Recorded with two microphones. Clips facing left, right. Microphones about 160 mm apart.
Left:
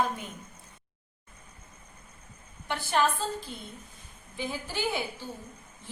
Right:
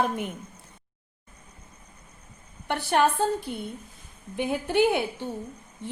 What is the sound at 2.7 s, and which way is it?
A woman's voice, 60° right (ahead or behind).